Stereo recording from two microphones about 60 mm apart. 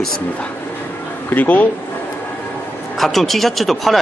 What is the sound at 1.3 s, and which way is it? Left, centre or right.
Speech, left.